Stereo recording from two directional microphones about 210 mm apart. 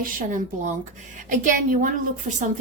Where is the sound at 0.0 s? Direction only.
40° right (ahead or behind).